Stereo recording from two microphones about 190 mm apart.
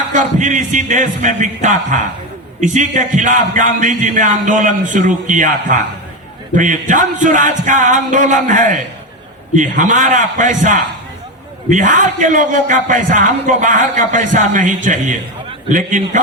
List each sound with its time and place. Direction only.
0.1 s a man's voice: 40° right (ahead or behind)